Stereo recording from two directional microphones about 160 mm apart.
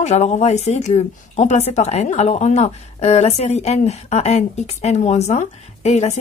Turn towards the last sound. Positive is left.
turn(degrees=45)  # may be behind; listen again after turning